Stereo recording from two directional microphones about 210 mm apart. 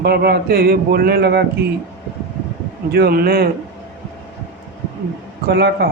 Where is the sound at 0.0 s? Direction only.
50° right (ahead or behind).